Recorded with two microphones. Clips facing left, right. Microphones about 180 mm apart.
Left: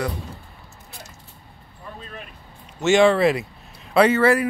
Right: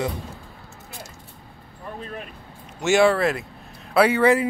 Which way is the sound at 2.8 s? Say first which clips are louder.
Left 2 dB; 10° right (ahead or behind).